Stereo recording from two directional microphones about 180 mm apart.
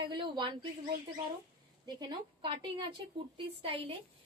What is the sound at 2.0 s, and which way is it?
A woman's voice, 25° right (ahead or behind).